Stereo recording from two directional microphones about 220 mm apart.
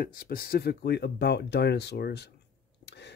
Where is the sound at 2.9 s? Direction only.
50° left (ahead or behind).